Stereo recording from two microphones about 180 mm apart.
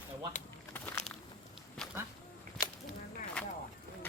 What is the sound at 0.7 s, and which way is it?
Walk, 5° left (ahead or behind).